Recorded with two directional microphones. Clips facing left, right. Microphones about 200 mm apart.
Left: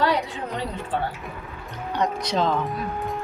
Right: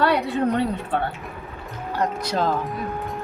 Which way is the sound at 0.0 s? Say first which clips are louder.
Right 4 dB; 60° right (ahead or behind).